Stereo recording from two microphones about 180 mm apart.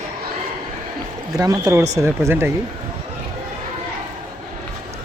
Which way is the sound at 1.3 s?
20° right (ahead or behind).